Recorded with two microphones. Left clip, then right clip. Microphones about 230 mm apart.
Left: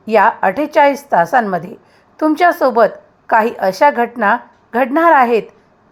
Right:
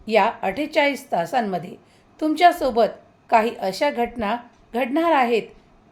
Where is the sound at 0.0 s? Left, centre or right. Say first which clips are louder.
Left 8 dB; centre.